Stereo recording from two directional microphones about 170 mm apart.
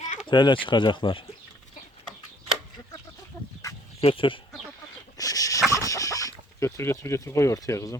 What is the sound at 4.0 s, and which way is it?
Speech, 35° left (ahead or behind).